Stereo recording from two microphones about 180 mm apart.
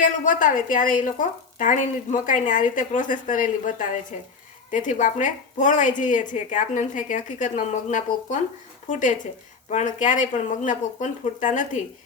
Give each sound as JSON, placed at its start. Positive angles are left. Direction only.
{"t": 0.0, "sound": "a woman's voice", "side_deg": 45}